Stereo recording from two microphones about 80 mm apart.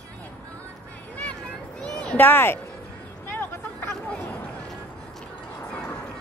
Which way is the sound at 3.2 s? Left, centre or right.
Left.